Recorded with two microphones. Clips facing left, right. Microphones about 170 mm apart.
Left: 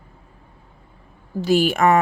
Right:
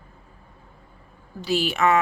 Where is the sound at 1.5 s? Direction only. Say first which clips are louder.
Left 5 dB; 50° left (ahead or behind).